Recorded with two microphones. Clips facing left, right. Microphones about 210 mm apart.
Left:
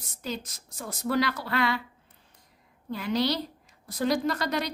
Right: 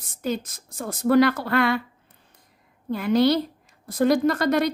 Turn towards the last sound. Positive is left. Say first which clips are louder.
# right 8 dB
turn(degrees=-50)  # may be behind; listen again after turning